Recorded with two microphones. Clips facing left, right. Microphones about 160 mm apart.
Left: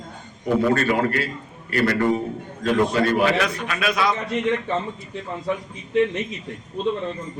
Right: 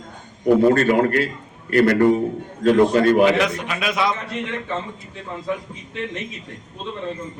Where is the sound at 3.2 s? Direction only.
20° right (ahead or behind).